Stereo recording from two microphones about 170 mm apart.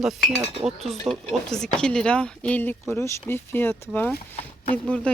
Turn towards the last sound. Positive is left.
turn(degrees=5)  # may be behind; listen again after turning